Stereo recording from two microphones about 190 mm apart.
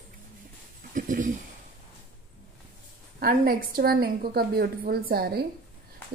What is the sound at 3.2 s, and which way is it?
A woman's voice, 50° right (ahead or behind).